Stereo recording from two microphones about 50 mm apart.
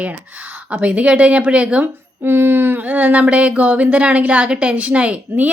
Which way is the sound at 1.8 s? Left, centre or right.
Right.